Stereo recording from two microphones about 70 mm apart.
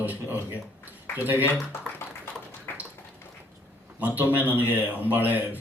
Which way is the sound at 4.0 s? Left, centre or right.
Right.